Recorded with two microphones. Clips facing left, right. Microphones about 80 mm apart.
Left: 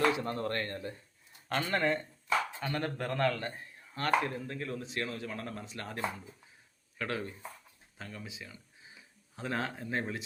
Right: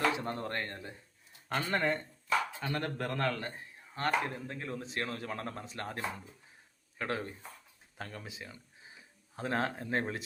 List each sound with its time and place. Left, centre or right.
0.3 s a man's voice: centre
3.9 s speech: right
7.0 s speech: right
7.9 s speech: right